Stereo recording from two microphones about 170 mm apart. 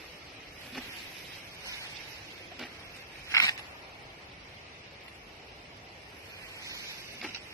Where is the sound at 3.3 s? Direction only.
20° left (ahead or behind).